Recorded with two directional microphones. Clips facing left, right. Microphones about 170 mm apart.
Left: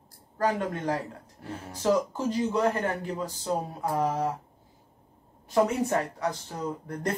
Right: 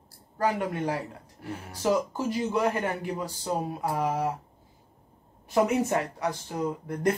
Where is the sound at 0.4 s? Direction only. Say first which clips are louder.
Even; 10° right (ahead or behind).